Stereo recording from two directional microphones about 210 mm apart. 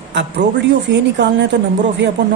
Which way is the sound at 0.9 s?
55° right (ahead or behind).